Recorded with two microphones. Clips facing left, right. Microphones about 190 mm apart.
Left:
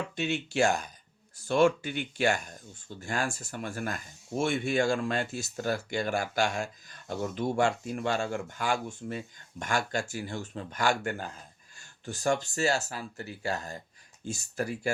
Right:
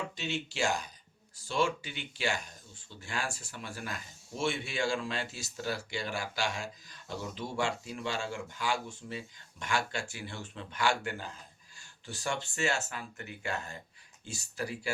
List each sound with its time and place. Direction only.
0.2 s speech: 55° left (ahead or behind); by 13.7 s 40° left (ahead or behind)
14.3 s speech: 50° left (ahead or behind)